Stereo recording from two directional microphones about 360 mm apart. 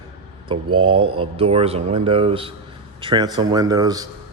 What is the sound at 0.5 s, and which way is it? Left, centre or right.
A man's voice, centre.